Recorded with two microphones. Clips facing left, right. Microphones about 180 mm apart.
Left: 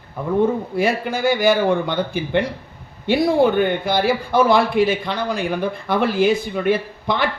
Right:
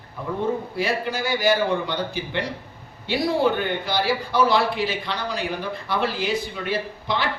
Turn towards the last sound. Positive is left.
turn(degrees=55)  # may be behind; listen again after turning